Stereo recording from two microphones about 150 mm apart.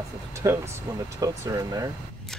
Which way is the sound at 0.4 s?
20° right (ahead or behind).